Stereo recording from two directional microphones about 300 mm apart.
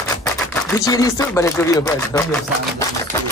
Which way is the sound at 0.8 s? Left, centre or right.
Centre.